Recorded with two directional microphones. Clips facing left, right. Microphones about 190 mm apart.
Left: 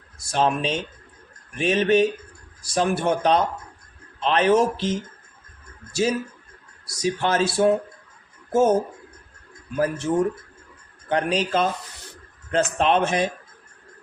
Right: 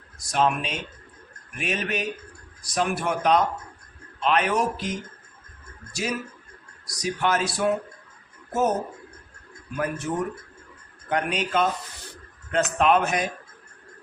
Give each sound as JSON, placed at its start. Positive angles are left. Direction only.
{"t": 0.2, "sound": "speech", "side_deg": 30}
{"t": 9.7, "sound": "speech", "side_deg": 30}
{"t": 11.1, "sound": "speech", "side_deg": 30}